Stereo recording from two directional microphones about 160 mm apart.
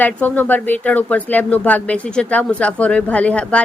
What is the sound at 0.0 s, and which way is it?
Speech, 10° left (ahead or behind).